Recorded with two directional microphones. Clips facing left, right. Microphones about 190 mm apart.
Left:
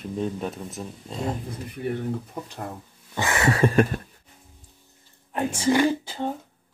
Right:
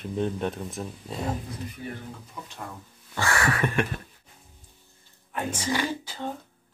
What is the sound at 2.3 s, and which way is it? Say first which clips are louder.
Speech: left 5 dB; 40° left (ahead or behind).